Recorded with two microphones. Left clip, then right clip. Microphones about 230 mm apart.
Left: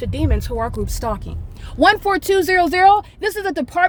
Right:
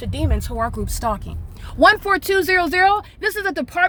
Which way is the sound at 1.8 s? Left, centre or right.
Centre.